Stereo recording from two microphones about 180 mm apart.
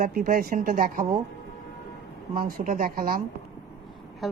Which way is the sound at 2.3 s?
50° right (ahead or behind).